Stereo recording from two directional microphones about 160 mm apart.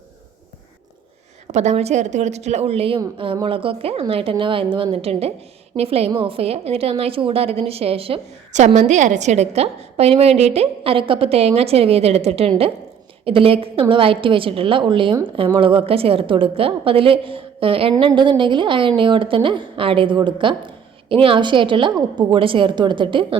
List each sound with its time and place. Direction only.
1.5 s a woman's voice: 45° right (ahead or behind)